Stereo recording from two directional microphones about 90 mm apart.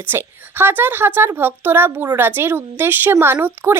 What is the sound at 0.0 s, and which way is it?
Speech, 25° right (ahead or behind).